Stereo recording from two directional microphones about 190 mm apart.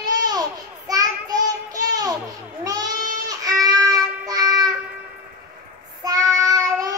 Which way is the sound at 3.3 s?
20° right (ahead or behind).